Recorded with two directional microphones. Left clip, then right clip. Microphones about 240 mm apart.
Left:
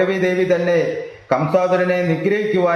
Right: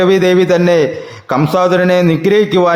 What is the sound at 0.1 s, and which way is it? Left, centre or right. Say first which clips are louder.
A man's voice: right 7 dB; right.